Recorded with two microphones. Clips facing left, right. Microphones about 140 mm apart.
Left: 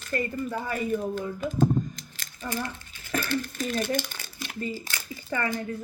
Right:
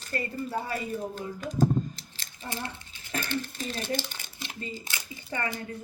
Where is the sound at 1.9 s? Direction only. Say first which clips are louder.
Left 3 dB; 25° right (ahead or behind).